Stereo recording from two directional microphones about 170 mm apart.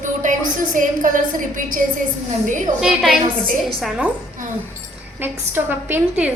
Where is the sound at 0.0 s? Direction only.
50° right (ahead or behind).